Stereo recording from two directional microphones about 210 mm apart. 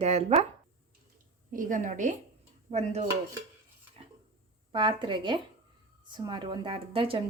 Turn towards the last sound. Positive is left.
turn(degrees=-25)  # may be behind; listen again after turning